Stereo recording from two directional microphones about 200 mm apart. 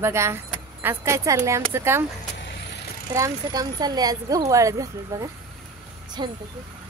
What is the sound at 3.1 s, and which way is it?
Speech, 15° right (ahead or behind).